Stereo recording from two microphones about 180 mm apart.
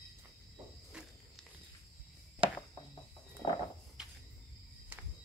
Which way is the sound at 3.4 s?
30° left (ahead or behind).